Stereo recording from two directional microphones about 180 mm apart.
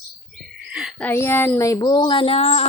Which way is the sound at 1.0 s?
15° left (ahead or behind).